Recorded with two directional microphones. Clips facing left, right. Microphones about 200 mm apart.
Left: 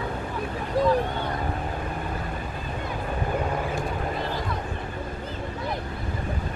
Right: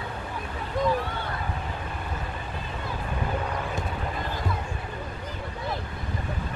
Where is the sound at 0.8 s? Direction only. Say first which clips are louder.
Left 4 dB; 35° left (ahead or behind).